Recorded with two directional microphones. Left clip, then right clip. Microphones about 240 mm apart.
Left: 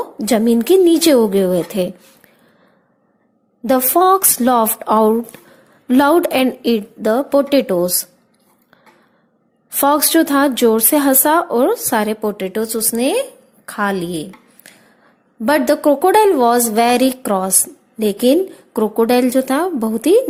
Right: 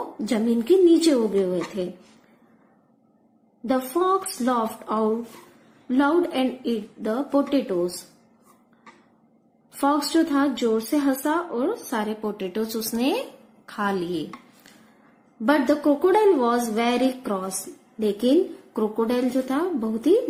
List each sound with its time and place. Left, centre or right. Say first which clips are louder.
0.3 s speech: left 8 dB; left
3.7 s speech: left 10 dB; left
9.8 s speech: left 8 dB; left
15.4 s speech: left 7 dB; left